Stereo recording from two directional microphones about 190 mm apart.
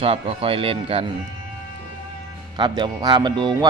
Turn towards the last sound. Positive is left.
turn(degrees=-25)  # may be behind; listen again after turning